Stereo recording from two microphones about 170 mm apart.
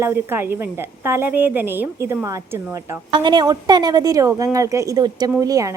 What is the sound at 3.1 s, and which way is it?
A woman's voice, 25° right (ahead or behind).